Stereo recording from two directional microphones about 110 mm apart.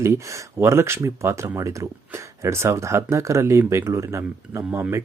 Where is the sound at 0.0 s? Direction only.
25° right (ahead or behind).